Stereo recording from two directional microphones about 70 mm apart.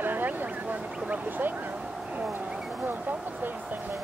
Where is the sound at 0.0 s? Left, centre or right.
Right.